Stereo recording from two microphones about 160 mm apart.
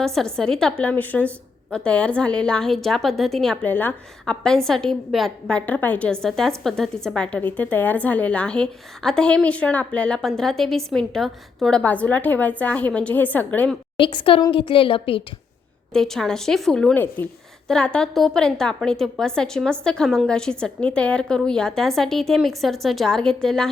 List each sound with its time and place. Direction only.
0.0 s a woman's voice: 5° left (ahead or behind)
14.0 s a woman's voice: 30° left (ahead or behind)
15.9 s a woman's voice: 5° left (ahead or behind)